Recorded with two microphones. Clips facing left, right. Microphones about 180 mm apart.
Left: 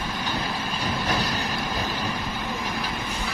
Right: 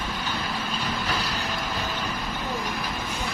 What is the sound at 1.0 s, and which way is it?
Vehicle, 40° left (ahead or behind).